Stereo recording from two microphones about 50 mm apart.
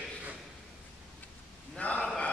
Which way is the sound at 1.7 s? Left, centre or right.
Left.